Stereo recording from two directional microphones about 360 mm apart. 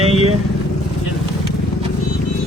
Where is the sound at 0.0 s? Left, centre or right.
Centre.